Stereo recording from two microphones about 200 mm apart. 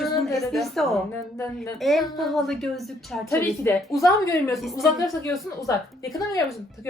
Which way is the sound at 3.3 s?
15° left (ahead or behind).